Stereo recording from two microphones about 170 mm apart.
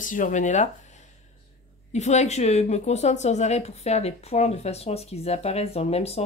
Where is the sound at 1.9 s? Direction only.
40° left (ahead or behind).